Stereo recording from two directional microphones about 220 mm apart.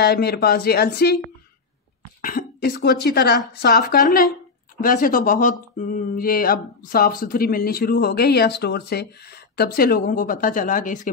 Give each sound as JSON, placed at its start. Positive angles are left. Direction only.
{"t": 0.0, "sound": "speech", "side_deg": 45}
{"t": 2.2, "sound": "speech", "side_deg": 45}